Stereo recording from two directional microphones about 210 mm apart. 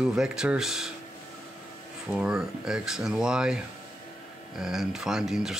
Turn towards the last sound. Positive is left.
turn(degrees=0)  # may be behind; listen again after turning